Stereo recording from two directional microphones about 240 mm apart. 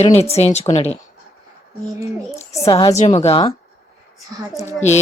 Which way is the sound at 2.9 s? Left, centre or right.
Left.